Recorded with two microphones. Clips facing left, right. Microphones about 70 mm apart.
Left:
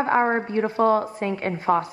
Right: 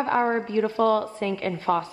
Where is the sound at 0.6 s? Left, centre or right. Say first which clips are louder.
Left 3 dB; left.